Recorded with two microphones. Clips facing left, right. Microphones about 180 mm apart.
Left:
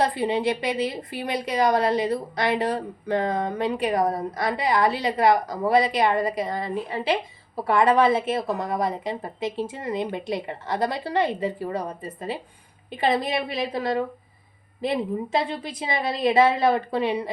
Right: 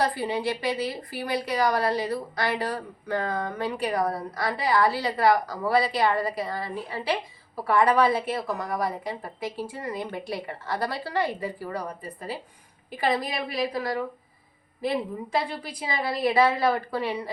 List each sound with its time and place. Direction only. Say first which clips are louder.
0.0 s speech: left 3 dB; 20° left (ahead or behind)